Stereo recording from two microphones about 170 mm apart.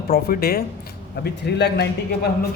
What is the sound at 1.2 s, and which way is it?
A man's voice, 75° left (ahead or behind).